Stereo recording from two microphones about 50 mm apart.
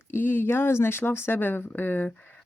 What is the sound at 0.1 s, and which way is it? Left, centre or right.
Speech, left.